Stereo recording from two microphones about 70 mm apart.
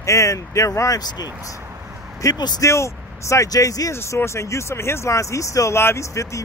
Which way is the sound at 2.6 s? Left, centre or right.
Left.